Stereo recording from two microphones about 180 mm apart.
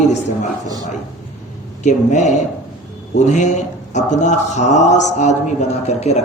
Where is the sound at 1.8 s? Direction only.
40° left (ahead or behind).